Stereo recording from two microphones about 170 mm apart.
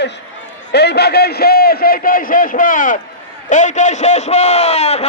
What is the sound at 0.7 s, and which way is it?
A man's voice, 80° left.